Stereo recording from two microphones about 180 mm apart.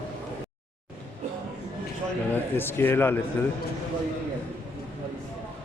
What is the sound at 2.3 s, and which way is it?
Speech, 10° left (ahead or behind).